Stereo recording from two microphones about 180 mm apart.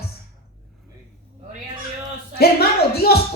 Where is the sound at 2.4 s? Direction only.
60° left (ahead or behind).